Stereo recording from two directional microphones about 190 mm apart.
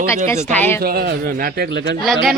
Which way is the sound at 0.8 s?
55° right (ahead or behind).